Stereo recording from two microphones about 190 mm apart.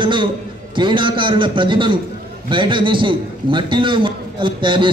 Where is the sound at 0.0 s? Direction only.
25° right (ahead or behind).